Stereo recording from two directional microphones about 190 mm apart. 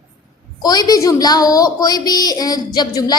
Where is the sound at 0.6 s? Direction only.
20° left (ahead or behind).